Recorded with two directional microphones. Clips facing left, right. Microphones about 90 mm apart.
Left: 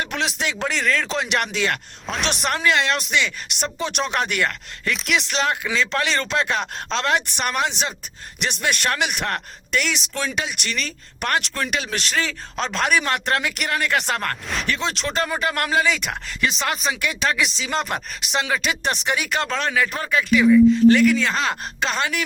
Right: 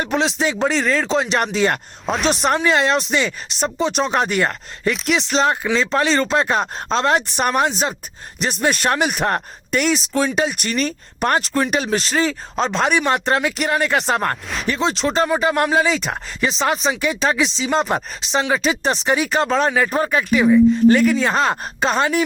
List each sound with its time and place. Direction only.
0.0 s speech: 30° right (ahead or behind)
2.0 s speech: 5° right (ahead or behind)
2.6 s speech: 30° right (ahead or behind)
15.3 s speech: 20° right (ahead or behind)